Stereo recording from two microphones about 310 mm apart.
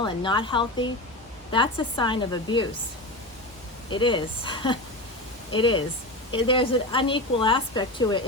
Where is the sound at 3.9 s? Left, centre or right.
Centre.